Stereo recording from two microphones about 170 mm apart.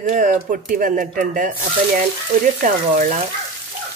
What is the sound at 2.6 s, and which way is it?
Speech, 50° right (ahead or behind).